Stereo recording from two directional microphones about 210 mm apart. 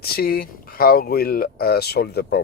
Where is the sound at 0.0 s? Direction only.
45° left (ahead or behind).